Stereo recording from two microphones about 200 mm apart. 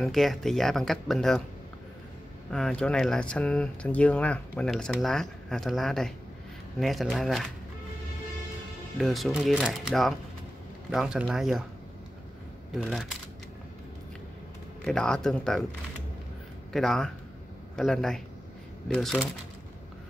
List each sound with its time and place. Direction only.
0.0 s speech: centre (ahead or behind)
2.5 s speech: 5° left (ahead or behind)
8.9 s speech: centre (ahead or behind)
12.7 s speech: centre (ahead or behind)
14.9 s speech: 5° left (ahead or behind)
16.7 s speech: centre (ahead or behind)